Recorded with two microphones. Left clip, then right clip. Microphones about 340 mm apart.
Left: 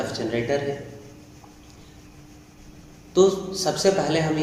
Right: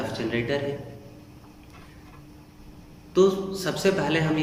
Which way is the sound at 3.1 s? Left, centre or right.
Centre.